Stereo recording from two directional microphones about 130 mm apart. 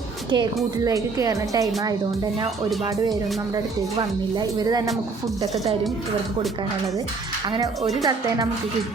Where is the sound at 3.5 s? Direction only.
30° right (ahead or behind).